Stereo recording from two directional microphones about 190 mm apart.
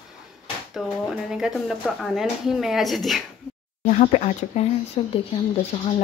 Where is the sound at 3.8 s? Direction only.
40° left (ahead or behind).